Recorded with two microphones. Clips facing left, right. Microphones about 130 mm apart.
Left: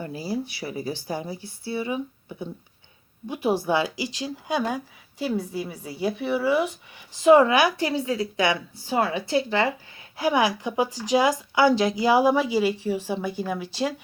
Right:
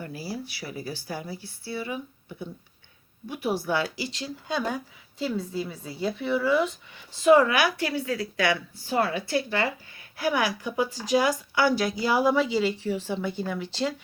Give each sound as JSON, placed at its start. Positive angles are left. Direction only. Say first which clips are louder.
{"t": 0.0, "sound": "speech", "louder": "left 5 dB", "side_deg": 20}
{"t": 3.2, "sound": "speech", "louder": "left 4 dB", "side_deg": 20}